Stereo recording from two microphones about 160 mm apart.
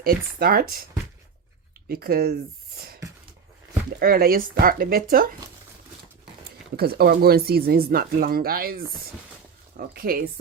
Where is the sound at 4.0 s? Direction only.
70° right (ahead or behind).